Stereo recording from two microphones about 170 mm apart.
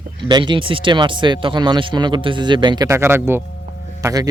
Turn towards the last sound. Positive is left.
turn(degrees=-20)  # may be behind; listen again after turning